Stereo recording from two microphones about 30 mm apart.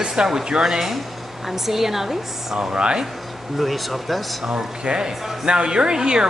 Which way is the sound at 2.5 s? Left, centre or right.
Right.